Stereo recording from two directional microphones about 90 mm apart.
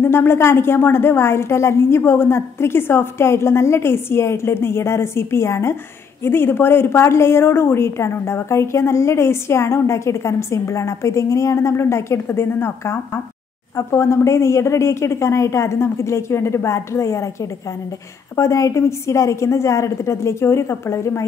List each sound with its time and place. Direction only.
0.0 s a woman's voice: 25° left (ahead or behind)